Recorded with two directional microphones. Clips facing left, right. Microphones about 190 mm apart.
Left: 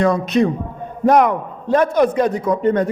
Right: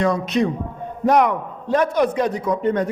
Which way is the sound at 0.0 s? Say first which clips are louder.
Left 3 dB; 50° left (ahead or behind).